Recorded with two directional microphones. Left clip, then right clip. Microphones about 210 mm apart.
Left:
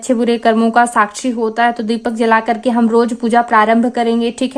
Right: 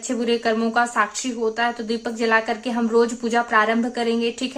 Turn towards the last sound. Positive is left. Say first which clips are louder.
# left 7 dB
turn(degrees=45)  # may be behind; listen again after turning